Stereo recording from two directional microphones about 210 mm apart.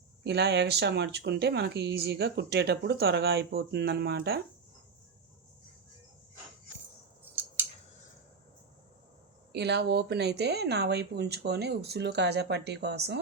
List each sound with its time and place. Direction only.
0.3 s speech: 55° right (ahead or behind)
9.5 s speech: 55° right (ahead or behind)